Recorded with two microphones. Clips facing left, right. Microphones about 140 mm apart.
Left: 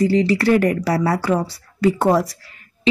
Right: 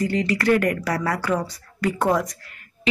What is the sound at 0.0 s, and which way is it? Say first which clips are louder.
Speech: left 6 dB; 30° left (ahead or behind).